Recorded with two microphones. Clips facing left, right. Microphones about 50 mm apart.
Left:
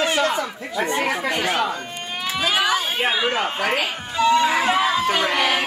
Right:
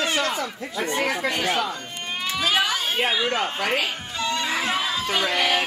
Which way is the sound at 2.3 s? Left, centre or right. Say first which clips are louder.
Left 3 dB; centre.